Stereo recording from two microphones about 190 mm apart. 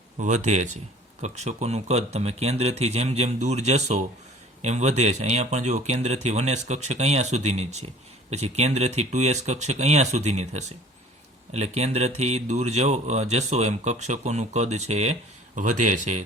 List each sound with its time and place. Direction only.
0.2 s speech: 40° right (ahead or behind)